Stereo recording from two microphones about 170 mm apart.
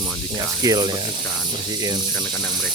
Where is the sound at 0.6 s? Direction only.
25° right (ahead or behind).